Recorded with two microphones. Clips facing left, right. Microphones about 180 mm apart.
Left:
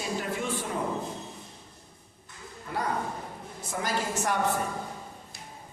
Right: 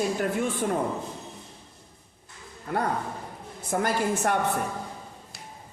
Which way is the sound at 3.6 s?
55° right (ahead or behind).